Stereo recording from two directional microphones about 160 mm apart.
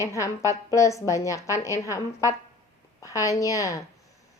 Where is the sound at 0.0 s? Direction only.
20° left (ahead or behind).